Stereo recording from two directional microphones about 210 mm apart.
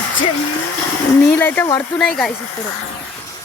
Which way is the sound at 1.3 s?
10° left (ahead or behind).